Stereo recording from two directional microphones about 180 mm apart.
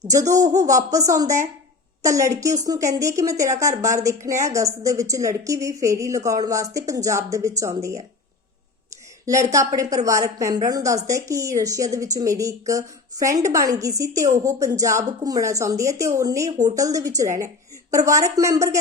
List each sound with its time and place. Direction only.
0.1 s a woman's voice: 20° right (ahead or behind)
9.2 s a woman's voice: 15° right (ahead or behind)